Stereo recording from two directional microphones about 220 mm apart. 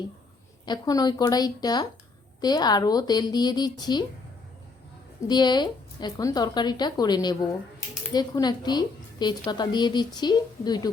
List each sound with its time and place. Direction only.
0.6 s a woman's voice: 20° left (ahead or behind)
5.3 s a woman's voice: 20° left (ahead or behind)